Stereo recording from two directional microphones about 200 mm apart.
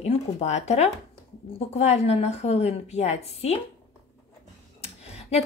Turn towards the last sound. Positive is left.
turn(degrees=30)  # may be behind; listen again after turning